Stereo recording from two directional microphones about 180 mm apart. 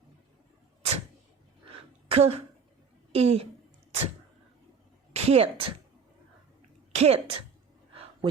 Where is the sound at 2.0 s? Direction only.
35° right (ahead or behind).